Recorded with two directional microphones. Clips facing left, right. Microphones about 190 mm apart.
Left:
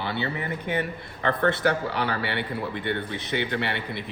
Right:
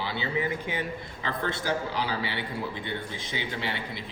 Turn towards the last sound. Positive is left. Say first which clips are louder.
# left 6 dB
turn(degrees=60)  # may be behind; listen again after turning